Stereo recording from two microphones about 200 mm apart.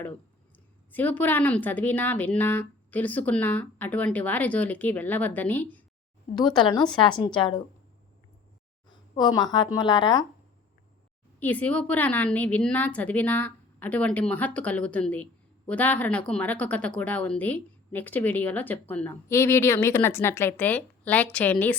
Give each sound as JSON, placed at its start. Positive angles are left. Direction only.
{"t": 0.9, "sound": "a woman's voice", "side_deg": 10}
{"t": 6.3, "sound": "a woman's voice", "side_deg": 20}
{"t": 8.9, "sound": "a woman's voice", "side_deg": 20}
{"t": 11.3, "sound": "a woman's voice", "side_deg": 10}